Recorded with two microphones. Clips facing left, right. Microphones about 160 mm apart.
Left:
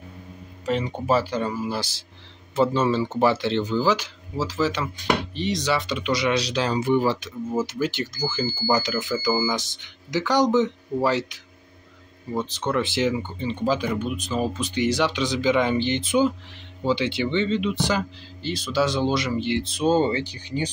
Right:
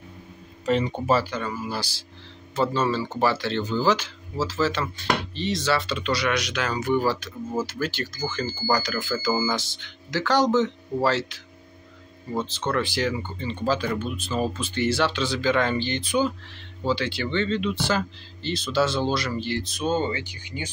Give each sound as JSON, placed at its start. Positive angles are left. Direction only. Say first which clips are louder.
{"t": 0.7, "sound": "speech", "louder": "right 1 dB", "side_deg": 10}
{"t": 1.2, "sound": "speech", "louder": "left 4 dB", "side_deg": 30}